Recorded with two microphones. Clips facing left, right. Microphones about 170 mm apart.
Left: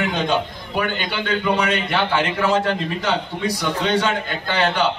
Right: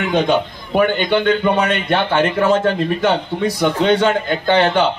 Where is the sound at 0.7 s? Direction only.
50° right (ahead or behind).